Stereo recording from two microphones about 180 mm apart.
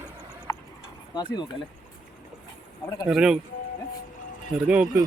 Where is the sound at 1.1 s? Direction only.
25° left (ahead or behind).